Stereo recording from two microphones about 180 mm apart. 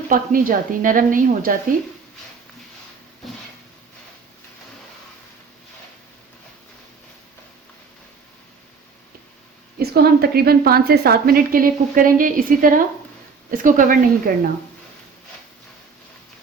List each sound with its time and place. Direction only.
0.1 s a woman's voice: 50° right (ahead or behind)
9.7 s a woman's voice: 60° right (ahead or behind)